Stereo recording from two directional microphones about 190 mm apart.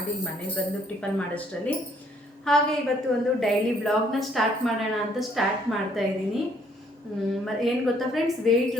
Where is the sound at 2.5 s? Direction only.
5° left (ahead or behind).